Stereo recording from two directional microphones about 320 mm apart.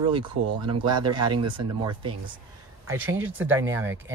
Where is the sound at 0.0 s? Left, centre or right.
Centre.